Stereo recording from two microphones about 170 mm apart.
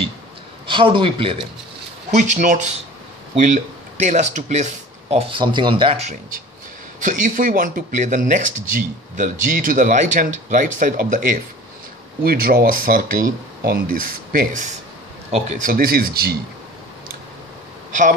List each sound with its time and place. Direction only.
0.7 s speech: 30° right (ahead or behind)
2.0 s speech: 45° right (ahead or behind)
5.1 s speech: 30° right (ahead or behind)
7.0 s speech: 50° right (ahead or behind)
12.2 s speech: 60° right (ahead or behind)